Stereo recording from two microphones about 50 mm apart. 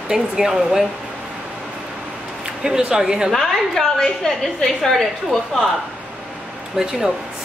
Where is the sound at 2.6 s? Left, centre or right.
Centre.